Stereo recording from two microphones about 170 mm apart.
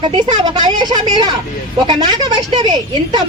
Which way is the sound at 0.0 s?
25° right (ahead or behind).